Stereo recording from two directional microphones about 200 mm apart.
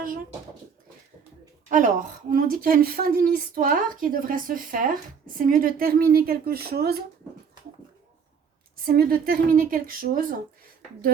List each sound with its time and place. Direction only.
1.7 s a woman's voice: 40° right (ahead or behind)
8.7 s a woman's voice: 45° right (ahead or behind)